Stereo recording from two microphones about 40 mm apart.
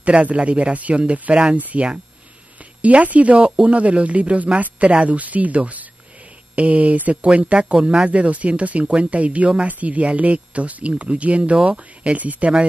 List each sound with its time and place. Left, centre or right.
0.0 s speech: right
1.6 s speech: right